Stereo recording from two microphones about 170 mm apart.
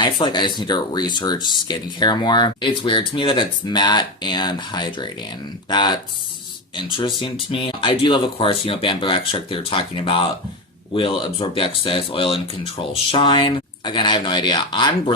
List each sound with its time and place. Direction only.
0.0 s speech: 25° left (ahead or behind)